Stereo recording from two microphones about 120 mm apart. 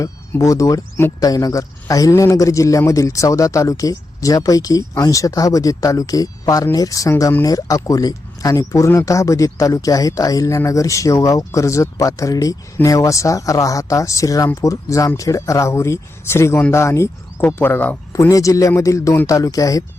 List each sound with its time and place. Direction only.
0.0 s speech: 25° left (ahead or behind)
18.1 s speech: 30° left (ahead or behind)